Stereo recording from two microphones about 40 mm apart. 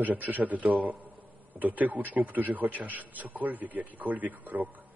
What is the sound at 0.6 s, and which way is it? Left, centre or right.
A man's voice, right.